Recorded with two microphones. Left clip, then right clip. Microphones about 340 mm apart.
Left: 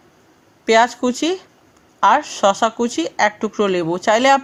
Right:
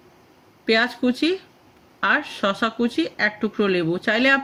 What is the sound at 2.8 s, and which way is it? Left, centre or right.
Speech, left.